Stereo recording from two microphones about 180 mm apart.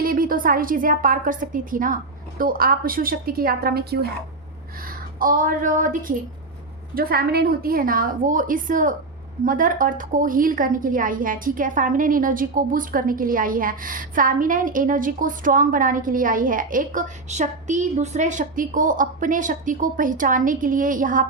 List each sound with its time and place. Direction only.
0.0 s a woman's voice: 55° right (ahead or behind)